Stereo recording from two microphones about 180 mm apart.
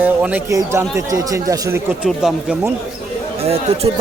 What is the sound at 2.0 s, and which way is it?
Speech, 5° right (ahead or behind).